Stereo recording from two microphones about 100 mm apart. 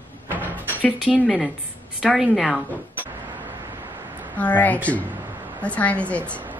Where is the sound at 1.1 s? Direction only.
5° left (ahead or behind).